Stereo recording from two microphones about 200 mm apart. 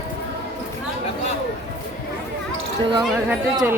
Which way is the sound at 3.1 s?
5° right (ahead or behind).